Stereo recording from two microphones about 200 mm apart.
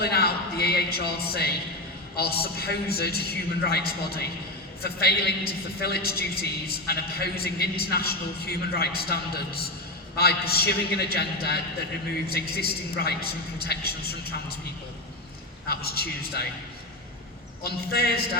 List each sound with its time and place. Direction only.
0.0 s a man's voice: 50° left (ahead or behind)
15.7 s a woman's voice: 50° left (ahead or behind)
17.6 s a woman's voice: 50° left (ahead or behind)